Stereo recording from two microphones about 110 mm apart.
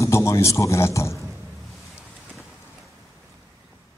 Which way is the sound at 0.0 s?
25° left (ahead or behind).